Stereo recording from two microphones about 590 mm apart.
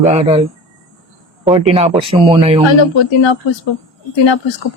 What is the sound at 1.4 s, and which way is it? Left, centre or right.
Speech, centre.